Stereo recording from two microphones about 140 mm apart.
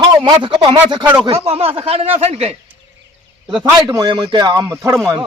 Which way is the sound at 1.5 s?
45° right (ahead or behind).